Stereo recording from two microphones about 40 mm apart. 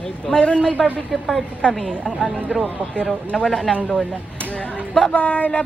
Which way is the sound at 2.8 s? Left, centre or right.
Right.